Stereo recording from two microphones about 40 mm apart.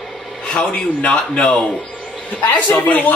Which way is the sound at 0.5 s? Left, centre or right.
Left.